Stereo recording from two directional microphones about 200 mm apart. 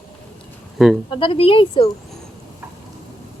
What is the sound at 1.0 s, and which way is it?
Speech, 25° left (ahead or behind).